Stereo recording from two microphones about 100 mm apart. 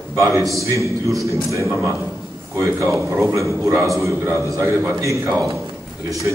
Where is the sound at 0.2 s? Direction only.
35° right (ahead or behind).